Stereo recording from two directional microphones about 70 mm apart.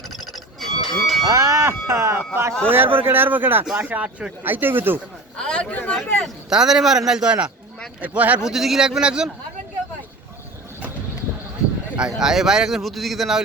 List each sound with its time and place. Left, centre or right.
0.6 s music: centre
1.3 s speech: right
5.4 s a sound: centre
6.5 s a man's voice: centre
8.4 s a man's voice: centre
12.2 s speech: centre